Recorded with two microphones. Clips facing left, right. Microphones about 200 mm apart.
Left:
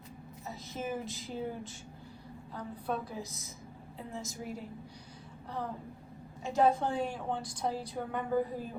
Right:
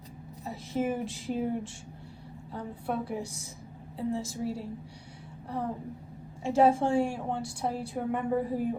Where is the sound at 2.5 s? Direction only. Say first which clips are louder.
Right 3 dB; 30° right (ahead or behind).